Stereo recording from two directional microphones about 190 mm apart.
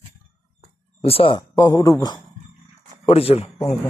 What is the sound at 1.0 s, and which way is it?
Speech, 30° left (ahead or behind).